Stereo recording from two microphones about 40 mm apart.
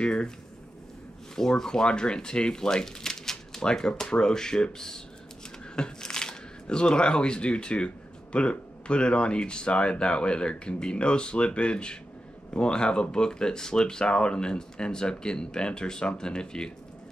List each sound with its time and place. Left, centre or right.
0.0 s speech: left
1.3 s speech: centre